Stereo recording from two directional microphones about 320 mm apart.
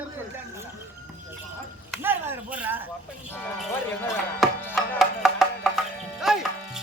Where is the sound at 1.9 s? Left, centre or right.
Centre.